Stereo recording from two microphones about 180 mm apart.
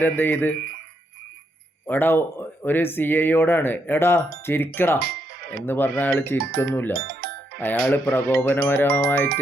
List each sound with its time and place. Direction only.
0.0 s speech: 10° left (ahead or behind)
1.9 s speech: 10° left (ahead or behind)
4.9 s music: 60° right (ahead or behind)
5.6 s speech: 10° left (ahead or behind)
6.9 s music: 60° right (ahead or behind)
7.6 s speech: 10° left (ahead or behind)